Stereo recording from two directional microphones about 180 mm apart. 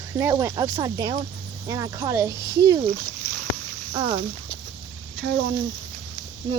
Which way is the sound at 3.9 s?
25° right (ahead or behind).